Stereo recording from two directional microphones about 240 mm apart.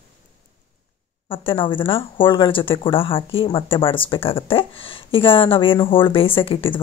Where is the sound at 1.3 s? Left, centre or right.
Left.